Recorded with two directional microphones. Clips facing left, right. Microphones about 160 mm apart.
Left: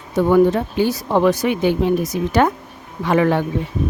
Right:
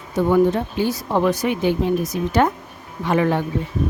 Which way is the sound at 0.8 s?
75° left (ahead or behind).